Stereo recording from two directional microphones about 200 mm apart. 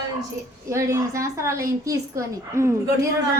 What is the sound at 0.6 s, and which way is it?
A woman's voice, 15° right (ahead or behind).